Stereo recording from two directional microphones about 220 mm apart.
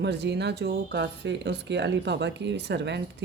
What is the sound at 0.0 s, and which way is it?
Speech, 50° right (ahead or behind).